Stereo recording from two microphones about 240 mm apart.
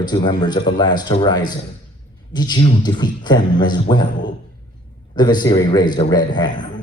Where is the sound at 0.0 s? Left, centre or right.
Centre.